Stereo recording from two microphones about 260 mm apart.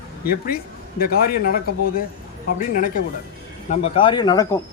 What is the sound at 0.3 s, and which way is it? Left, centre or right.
Speech, left.